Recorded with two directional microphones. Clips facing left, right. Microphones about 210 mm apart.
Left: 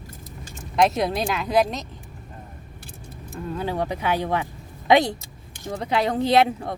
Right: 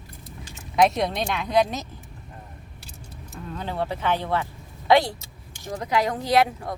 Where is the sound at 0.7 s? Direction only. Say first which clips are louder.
Even; centre (ahead or behind).